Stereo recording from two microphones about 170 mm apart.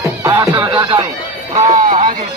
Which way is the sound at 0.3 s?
25° right (ahead or behind).